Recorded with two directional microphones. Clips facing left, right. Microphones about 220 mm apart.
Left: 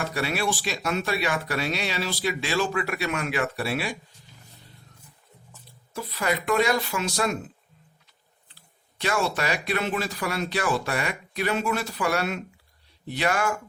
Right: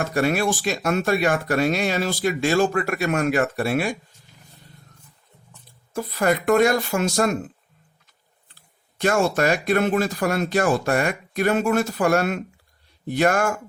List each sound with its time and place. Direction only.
0.0 s speech: 45° right (ahead or behind)
5.9 s speech: 50° right (ahead or behind)